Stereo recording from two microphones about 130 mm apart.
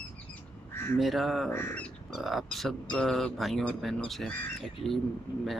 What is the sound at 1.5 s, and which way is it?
Crow, 15° left (ahead or behind).